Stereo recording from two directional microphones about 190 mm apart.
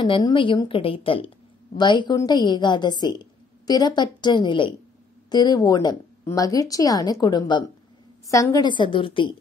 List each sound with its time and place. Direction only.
0.0 s a woman's voice: 25° left (ahead or behind)